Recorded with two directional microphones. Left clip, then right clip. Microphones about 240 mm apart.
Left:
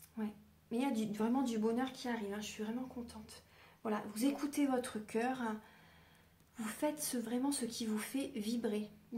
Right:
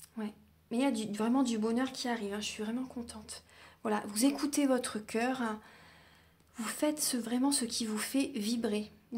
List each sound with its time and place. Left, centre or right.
0.2 s speech: right